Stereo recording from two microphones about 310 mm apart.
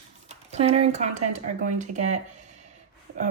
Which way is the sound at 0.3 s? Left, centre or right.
Right.